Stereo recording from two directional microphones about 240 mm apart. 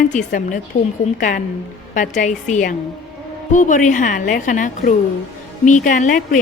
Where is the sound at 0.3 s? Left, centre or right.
Left.